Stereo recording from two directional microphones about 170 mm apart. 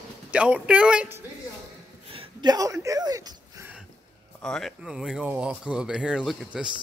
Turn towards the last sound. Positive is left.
turn(degrees=-5)  # may be behind; listen again after turning